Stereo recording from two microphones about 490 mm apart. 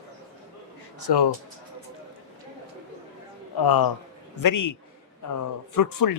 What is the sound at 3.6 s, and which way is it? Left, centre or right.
Speech, left.